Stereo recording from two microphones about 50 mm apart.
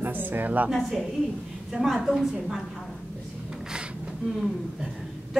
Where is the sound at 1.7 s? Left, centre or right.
Centre.